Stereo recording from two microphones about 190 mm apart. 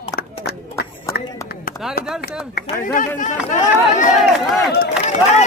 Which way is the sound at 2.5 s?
45° left (ahead or behind).